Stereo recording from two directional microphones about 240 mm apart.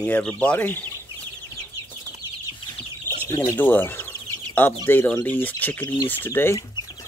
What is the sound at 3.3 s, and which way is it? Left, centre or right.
Speech, centre.